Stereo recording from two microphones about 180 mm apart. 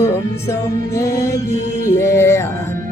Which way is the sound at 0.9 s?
15° left (ahead or behind).